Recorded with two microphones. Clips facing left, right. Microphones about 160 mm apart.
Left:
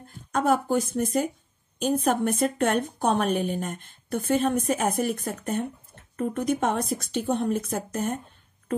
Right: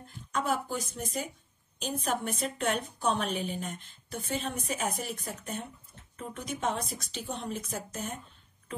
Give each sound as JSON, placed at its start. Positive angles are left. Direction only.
{"t": 0.3, "sound": "a woman's voice", "side_deg": 55}